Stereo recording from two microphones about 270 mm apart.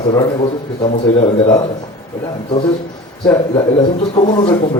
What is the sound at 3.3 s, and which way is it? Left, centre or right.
A man's voice, centre.